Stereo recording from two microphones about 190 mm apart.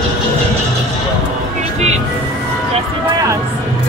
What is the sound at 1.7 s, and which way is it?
Music, 35° right (ahead or behind).